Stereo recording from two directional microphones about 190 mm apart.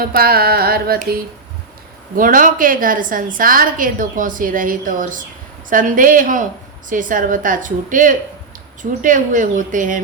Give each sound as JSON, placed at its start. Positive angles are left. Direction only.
{"t": 0.0, "sound": "a woman's voice", "side_deg": -50}